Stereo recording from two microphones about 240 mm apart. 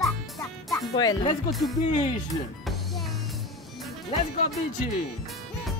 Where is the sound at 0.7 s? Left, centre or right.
Centre.